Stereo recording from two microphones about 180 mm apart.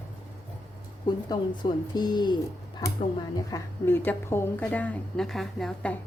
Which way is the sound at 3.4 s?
15° left (ahead or behind).